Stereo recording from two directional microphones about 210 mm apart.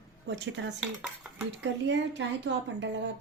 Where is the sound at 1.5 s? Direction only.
55° right (ahead or behind).